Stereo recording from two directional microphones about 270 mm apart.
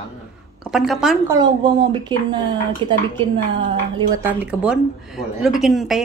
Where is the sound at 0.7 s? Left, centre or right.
Centre.